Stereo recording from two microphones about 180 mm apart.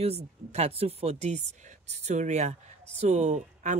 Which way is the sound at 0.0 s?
35° right (ahead or behind).